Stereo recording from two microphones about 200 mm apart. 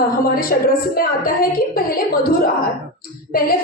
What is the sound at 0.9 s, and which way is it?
A woman's voice, 45° left (ahead or behind).